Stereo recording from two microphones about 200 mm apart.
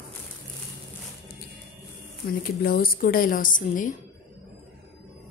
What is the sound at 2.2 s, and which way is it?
A woman's voice, 50° left (ahead or behind).